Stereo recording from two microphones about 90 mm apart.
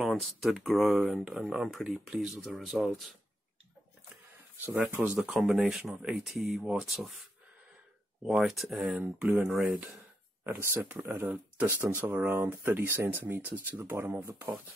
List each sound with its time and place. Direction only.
0.0 s speech: centre (ahead or behind)
4.9 s speech: 10° right (ahead or behind)
9.0 s speech: 15° right (ahead or behind)
10.4 s speech: 25° right (ahead or behind)